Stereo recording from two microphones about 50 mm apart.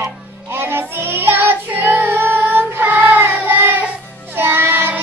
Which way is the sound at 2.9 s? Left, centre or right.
Right.